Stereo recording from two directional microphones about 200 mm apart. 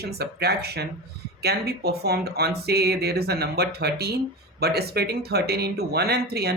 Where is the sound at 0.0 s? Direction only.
55° right (ahead or behind).